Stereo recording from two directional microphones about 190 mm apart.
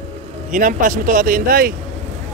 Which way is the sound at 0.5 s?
45° right (ahead or behind).